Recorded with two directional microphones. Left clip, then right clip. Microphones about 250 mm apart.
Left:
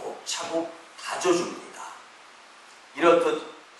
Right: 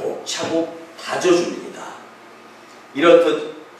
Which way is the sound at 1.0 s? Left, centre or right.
Centre.